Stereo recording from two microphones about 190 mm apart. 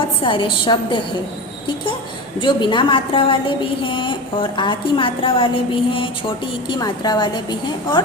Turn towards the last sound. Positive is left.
turn(degrees=20)  # may be behind; listen again after turning